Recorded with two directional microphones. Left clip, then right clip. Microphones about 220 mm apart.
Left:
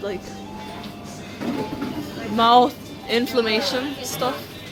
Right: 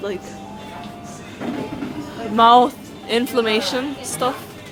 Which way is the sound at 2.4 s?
15° right (ahead or behind).